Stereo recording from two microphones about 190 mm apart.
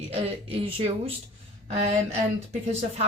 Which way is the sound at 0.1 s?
30° right (ahead or behind).